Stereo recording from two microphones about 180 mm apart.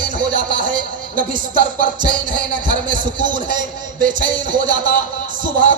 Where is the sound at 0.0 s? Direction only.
50° right (ahead or behind).